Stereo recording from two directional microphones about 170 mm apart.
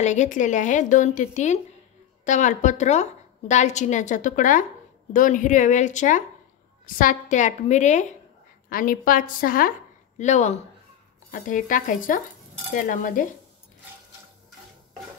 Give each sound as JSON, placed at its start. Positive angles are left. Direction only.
{"t": 0.0, "sound": "a woman's voice", "side_deg": 45}
{"t": 8.6, "sound": "a woman's voice", "side_deg": 55}